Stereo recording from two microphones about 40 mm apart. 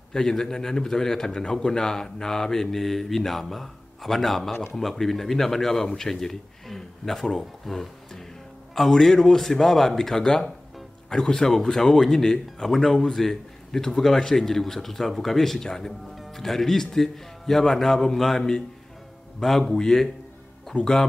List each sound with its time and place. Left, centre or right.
0.1 s a man's voice: centre
20.7 s speech: left